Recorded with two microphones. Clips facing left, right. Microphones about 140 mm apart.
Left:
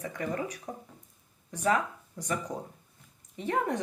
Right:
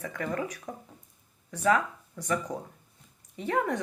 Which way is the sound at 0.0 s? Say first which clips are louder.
Right 1 dB; 20° left (ahead or behind).